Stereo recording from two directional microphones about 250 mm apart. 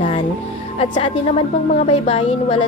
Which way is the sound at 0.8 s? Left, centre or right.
Left.